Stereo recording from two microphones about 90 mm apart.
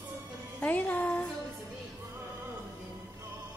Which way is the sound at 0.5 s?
20° left (ahead or behind).